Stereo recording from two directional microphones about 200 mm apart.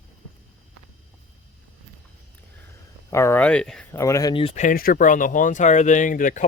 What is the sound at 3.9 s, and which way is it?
Speech, 15° left (ahead or behind).